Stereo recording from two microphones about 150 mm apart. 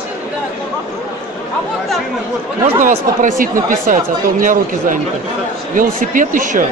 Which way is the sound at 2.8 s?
60° right (ahead or behind).